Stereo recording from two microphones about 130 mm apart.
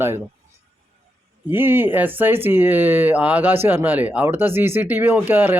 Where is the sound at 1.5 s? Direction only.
15° right (ahead or behind).